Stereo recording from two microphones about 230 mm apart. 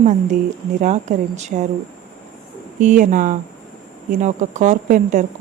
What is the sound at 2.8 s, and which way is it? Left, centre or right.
Speech, right.